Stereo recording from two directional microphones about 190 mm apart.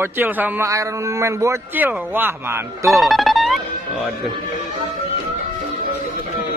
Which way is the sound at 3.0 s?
Centre (ahead or behind).